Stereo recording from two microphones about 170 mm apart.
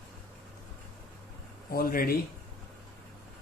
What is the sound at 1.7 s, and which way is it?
Speech, 60° left (ahead or behind).